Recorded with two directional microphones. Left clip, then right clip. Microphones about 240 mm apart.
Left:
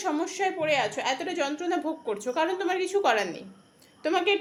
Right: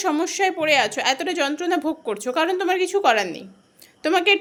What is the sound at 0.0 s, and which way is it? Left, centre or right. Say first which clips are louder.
A woman's voice: right 7 dB; right.